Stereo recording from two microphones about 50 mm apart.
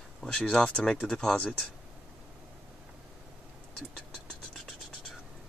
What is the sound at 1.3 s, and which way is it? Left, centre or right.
Speech, left.